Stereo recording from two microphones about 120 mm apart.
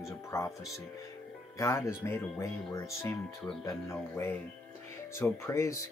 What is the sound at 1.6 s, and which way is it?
Speech, 25° left (ahead or behind).